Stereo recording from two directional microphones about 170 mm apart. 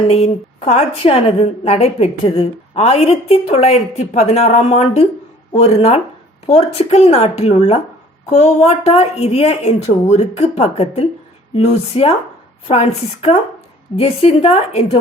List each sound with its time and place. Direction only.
0.1 s a woman's voice: 40° left (ahead or behind)